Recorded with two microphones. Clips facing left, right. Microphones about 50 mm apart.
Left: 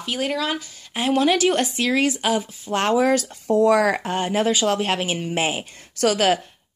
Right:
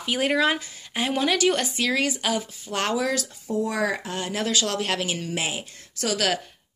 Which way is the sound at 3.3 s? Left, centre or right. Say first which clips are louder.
Left 10 dB; left.